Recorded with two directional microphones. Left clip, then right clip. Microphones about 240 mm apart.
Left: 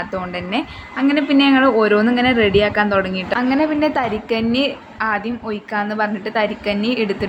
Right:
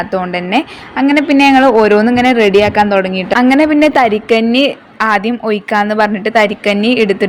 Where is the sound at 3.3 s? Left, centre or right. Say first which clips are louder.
Right 8 dB; right.